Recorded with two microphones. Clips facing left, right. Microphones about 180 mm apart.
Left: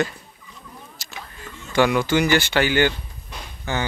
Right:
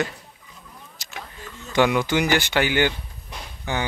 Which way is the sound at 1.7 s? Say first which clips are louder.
Left 1 dB; 20° right (ahead or behind).